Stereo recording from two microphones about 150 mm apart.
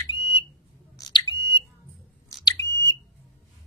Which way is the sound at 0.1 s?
30° left (ahead or behind).